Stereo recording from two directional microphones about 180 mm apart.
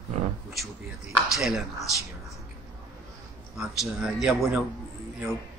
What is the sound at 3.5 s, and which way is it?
Speech, centre (ahead or behind).